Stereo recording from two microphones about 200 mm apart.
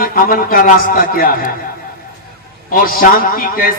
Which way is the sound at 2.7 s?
45° left (ahead or behind).